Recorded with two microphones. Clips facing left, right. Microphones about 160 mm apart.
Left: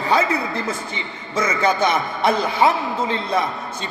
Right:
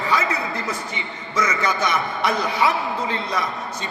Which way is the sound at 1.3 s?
30° left (ahead or behind).